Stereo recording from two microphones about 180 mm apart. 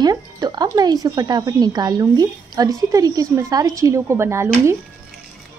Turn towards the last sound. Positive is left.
turn(degrees=-15)  # may be behind; listen again after turning